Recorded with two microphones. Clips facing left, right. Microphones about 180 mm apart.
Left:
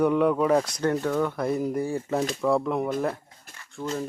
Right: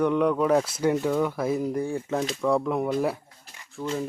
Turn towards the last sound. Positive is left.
turn(degrees=0)  # may be behind; listen again after turning